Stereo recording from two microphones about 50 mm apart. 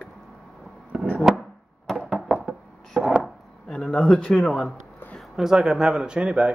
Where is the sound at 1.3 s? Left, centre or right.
Centre.